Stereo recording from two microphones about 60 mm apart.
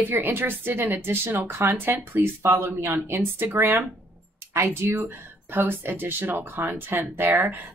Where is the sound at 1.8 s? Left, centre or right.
Right.